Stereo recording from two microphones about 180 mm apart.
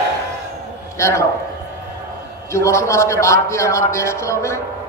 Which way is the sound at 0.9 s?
15° left (ahead or behind).